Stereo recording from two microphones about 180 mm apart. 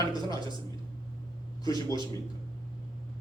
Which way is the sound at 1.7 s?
20° left (ahead or behind).